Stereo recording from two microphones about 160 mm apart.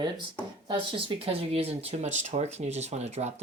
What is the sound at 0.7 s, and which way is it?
Speech, 35° right (ahead or behind).